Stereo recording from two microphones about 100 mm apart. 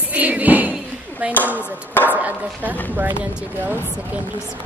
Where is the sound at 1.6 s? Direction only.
20° left (ahead or behind).